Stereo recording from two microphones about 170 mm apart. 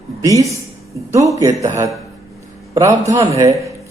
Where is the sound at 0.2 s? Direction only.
20° right (ahead or behind).